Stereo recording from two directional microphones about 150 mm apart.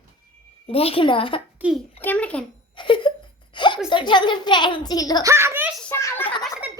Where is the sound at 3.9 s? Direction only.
30° left (ahead or behind).